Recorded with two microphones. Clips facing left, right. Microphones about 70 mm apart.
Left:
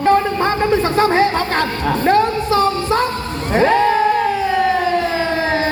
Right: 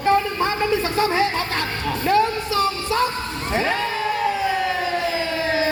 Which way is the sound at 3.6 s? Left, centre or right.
Left.